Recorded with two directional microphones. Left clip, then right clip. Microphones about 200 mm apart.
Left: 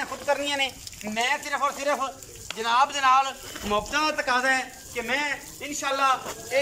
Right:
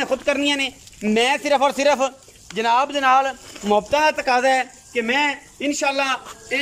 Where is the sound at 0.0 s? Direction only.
55° right (ahead or behind).